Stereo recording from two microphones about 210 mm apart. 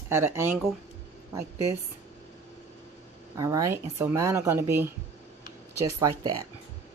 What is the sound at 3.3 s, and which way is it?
A woman's voice, 15° right (ahead or behind).